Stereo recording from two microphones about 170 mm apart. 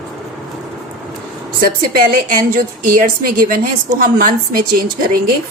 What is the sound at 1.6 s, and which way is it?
A woman's voice, 60° right (ahead or behind).